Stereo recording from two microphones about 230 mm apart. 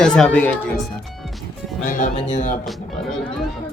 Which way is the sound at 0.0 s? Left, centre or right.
Centre.